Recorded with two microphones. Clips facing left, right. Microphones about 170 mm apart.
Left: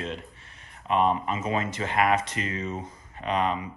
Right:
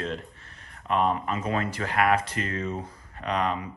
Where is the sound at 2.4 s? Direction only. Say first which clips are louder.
Right 1 dB; 50° right (ahead or behind).